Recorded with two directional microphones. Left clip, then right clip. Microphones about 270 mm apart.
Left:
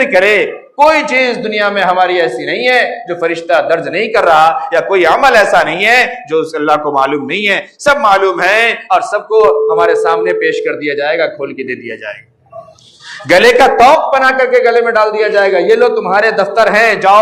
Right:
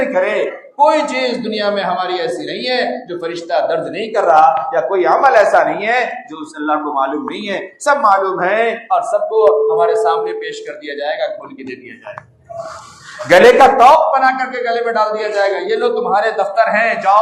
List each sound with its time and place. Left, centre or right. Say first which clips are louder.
0.1 s a man's voice: left 6 dB; left
13.2 s a man's voice: even; left